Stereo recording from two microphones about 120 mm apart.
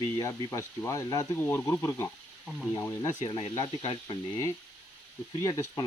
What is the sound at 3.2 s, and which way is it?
Speech, 35° left (ahead or behind).